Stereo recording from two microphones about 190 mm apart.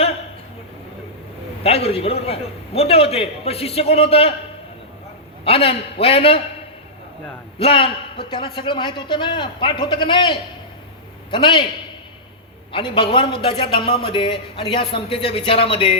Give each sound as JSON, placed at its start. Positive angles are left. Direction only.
{"t": 1.6, "sound": "a man's voice", "side_deg": 30}
{"t": 5.5, "sound": "a man's voice", "side_deg": 30}
{"t": 7.6, "sound": "a man's voice", "side_deg": 30}
{"t": 12.7, "sound": "a man's voice", "side_deg": 25}